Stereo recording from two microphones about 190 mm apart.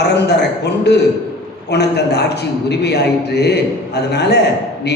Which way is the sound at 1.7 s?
60° left (ahead or behind).